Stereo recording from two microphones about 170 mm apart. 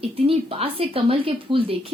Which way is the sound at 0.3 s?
35° right (ahead or behind).